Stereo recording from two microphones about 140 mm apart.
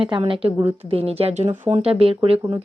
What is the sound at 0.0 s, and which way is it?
A woman's voice, 40° right (ahead or behind).